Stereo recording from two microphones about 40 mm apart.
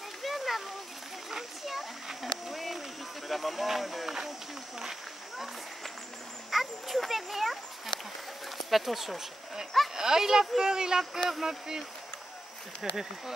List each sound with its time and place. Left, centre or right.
0.2 s a sound: centre
3.3 s speech: centre
6.5 s a sound: centre
8.6 s speech: centre
9.9 s speech: centre
12.8 s speech: centre